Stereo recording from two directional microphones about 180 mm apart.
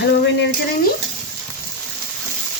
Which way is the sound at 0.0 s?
70° left (ahead or behind).